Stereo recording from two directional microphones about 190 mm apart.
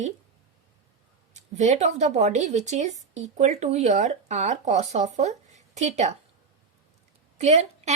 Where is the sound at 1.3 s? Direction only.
40° right (ahead or behind).